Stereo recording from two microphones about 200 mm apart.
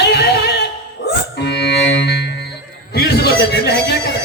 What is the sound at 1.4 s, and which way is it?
Music, 60° left (ahead or behind).